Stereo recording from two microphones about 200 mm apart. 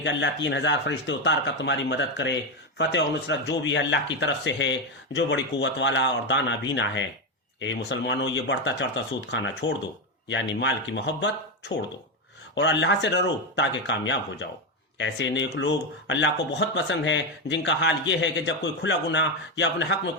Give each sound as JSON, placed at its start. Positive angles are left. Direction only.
{"t": 0.0, "sound": "speech", "side_deg": 60}
{"t": 12.5, "sound": "speech", "side_deg": 60}